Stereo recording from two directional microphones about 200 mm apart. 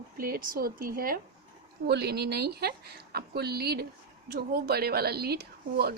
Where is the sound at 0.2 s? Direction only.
45° right (ahead or behind).